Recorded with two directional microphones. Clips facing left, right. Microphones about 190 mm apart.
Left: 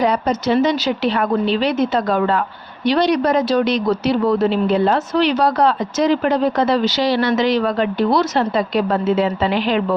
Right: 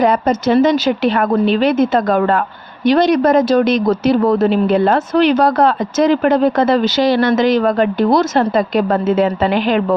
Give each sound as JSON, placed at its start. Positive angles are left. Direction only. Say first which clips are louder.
{"t": 0.0, "sound": "speech", "louder": "right 4 dB", "side_deg": -50}